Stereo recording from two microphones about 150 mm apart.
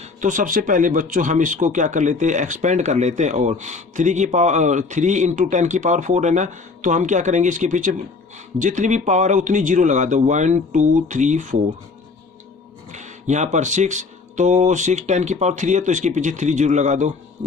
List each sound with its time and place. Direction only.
0.0 s speech: 55° right (ahead or behind)
12.9 s speech: 55° right (ahead or behind)